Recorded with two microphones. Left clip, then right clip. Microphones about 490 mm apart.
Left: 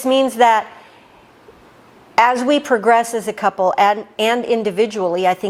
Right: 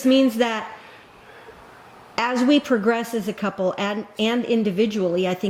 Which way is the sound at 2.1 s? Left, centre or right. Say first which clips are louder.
Left 6 dB; left.